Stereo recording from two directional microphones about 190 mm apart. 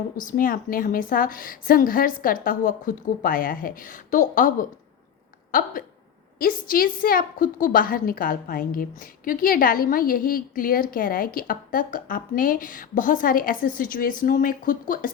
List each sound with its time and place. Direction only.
0.2 s a woman's voice: 45° left (ahead or behind)